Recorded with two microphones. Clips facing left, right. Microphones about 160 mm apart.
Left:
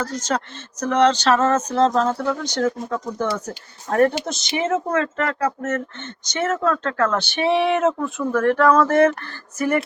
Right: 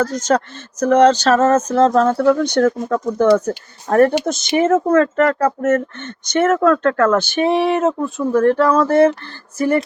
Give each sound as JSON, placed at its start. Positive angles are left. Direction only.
{"t": 0.3, "sound": "speech", "side_deg": -45}